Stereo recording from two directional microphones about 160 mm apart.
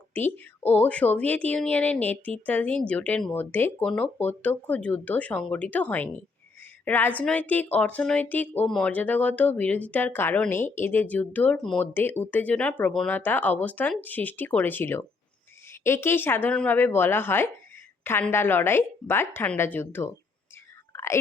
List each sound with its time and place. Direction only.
0.1 s a woman's voice: 10° left (ahead or behind)
20.9 s whispering: 15° left (ahead or behind)